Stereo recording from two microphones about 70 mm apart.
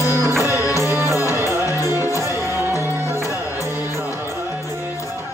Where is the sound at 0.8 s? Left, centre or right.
Right.